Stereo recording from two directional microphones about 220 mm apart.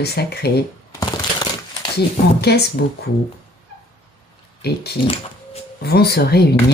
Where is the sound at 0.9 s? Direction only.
15° left (ahead or behind).